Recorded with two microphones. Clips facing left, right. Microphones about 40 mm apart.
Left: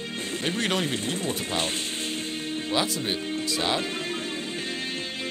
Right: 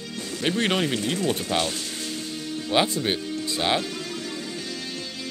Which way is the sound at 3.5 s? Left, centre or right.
Right.